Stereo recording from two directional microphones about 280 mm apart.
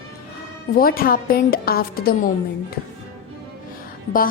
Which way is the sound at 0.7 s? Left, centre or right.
Left.